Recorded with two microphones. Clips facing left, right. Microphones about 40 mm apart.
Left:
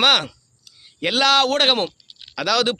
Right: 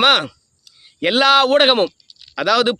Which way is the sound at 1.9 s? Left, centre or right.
Left.